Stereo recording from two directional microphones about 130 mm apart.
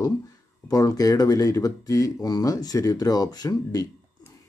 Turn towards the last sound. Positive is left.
turn(degrees=30)  # may be behind; listen again after turning